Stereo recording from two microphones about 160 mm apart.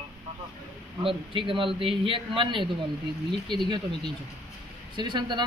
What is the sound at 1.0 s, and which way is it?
A man's voice, 30° right (ahead or behind).